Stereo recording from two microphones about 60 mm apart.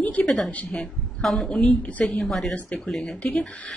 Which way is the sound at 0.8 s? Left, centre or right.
Centre.